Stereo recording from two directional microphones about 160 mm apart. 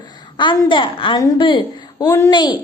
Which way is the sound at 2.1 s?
20° left (ahead or behind).